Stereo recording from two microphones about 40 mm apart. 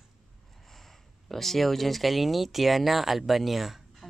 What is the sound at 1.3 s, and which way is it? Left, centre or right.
Speech, centre.